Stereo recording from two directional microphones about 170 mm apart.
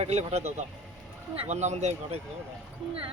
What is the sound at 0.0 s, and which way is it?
Speech, 40° right (ahead or behind).